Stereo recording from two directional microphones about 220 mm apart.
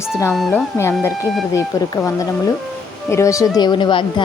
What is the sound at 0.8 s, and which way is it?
Speech, 10° left (ahead or behind).